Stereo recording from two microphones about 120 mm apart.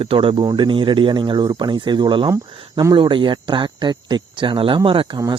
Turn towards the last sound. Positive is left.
turn(degrees=-45)  # may be behind; listen again after turning